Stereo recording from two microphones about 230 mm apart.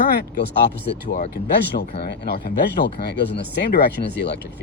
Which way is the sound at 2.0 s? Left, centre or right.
Left.